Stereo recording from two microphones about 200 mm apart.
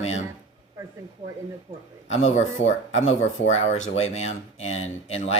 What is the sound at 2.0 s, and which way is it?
Speech, 35° left (ahead or behind).